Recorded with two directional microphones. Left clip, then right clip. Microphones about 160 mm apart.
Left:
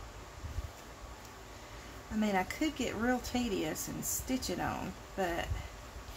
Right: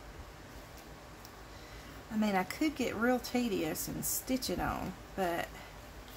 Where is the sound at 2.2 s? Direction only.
15° right (ahead or behind).